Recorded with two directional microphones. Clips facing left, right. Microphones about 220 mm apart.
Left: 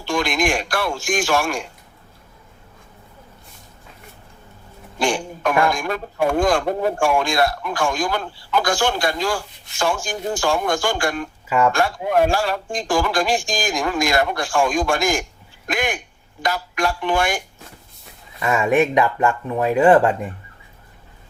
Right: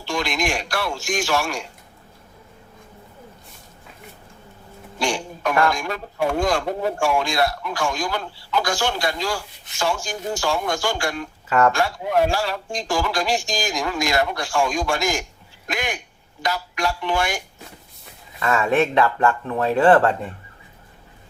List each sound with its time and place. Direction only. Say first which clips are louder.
0.0 s a man's voice: left 4 dB; 50° left (ahead or behind)
4.9 s a man's voice: left 3 dB; 50° left (ahead or behind)
11.4 s speech: even; 10° left (ahead or behind)
11.7 s a man's voice: left 2 dB; 50° left (ahead or behind)
18.3 s speech: left 2 dB; 15° left (ahead or behind)